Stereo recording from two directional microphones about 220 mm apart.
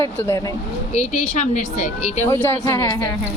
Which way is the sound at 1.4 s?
35° left (ahead or behind).